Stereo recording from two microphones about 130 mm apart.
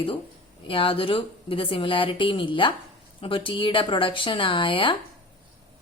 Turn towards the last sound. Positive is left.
turn(degrees=40)  # may be behind; listen again after turning